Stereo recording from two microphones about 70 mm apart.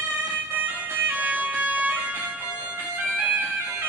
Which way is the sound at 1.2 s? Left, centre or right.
Right.